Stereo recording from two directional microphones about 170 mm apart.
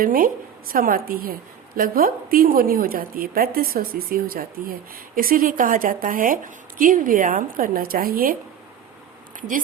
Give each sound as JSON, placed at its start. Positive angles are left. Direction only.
{"t": 0.0, "sound": "a woman's voice", "side_deg": -55}